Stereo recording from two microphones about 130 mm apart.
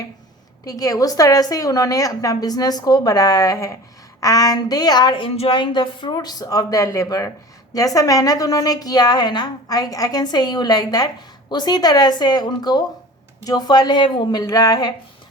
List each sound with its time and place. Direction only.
0.6 s a woman's voice: 25° left (ahead or behind)